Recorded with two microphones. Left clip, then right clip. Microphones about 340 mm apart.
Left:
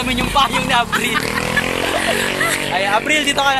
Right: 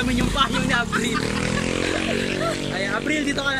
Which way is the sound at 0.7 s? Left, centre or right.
Centre.